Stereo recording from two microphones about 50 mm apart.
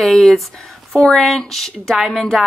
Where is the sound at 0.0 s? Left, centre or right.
Centre.